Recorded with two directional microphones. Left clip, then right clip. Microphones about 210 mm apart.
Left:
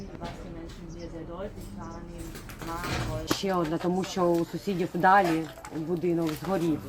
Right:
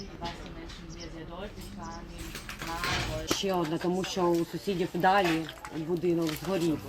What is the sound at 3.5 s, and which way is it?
Speech, 20° right (ahead or behind).